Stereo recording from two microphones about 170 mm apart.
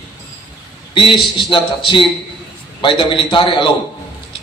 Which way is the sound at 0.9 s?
30° left (ahead or behind).